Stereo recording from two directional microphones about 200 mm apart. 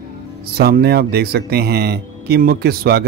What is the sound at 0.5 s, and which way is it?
Speech, 50° right (ahead or behind).